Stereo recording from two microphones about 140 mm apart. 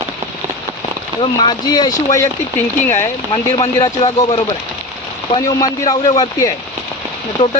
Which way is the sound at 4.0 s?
45° left (ahead or behind).